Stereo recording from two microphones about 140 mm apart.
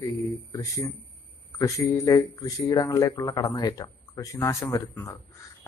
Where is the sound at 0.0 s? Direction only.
25° left (ahead or behind).